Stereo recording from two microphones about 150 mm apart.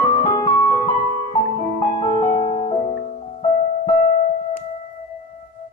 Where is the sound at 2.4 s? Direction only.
40° left (ahead or behind).